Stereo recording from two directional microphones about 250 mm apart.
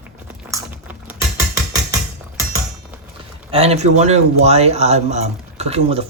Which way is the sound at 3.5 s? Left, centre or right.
Right.